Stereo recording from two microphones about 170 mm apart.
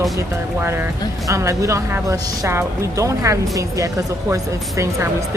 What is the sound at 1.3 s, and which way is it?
Speech, 15° right (ahead or behind).